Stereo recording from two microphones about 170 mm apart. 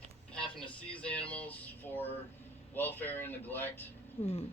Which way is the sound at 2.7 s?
10° left (ahead or behind).